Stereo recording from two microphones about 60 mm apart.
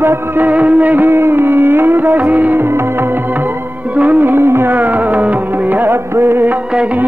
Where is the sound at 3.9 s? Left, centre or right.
Right.